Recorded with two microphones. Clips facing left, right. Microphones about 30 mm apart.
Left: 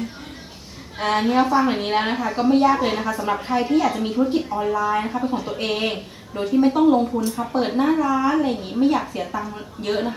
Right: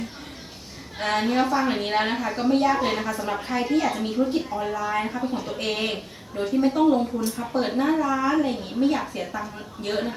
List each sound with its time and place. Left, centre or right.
0.9 s speech: centre